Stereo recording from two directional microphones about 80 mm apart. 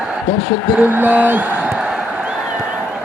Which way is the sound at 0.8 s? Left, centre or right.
Right.